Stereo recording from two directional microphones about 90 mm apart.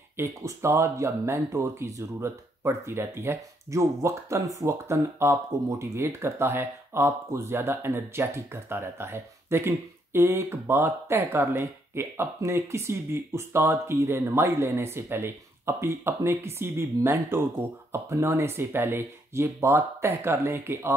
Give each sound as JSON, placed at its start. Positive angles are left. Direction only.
{"t": 0.2, "sound": "speech", "side_deg": -30}